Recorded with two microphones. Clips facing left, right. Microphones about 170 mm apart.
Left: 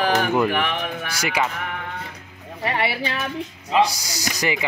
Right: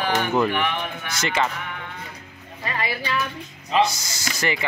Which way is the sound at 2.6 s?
75° left (ahead or behind).